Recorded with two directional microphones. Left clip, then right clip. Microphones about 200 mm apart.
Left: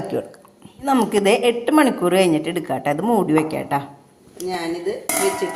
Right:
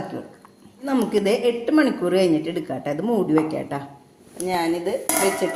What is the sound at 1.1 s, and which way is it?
A woman's voice, 25° left (ahead or behind).